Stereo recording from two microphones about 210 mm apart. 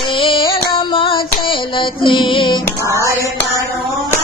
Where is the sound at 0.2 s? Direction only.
25° left (ahead or behind).